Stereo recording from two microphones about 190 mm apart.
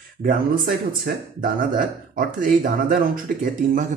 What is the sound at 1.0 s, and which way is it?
Speech, 50° right (ahead or behind).